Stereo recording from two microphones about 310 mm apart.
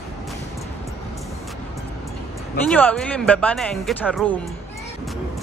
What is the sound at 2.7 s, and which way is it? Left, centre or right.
Speech, centre.